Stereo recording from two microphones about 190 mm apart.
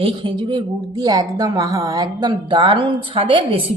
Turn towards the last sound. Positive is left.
turn(degrees=-25)  # may be behind; listen again after turning